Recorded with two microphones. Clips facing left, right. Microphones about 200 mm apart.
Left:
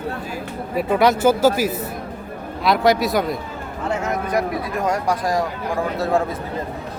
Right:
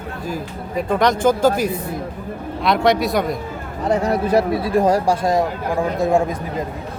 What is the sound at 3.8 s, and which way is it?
Speech, 35° right (ahead or behind).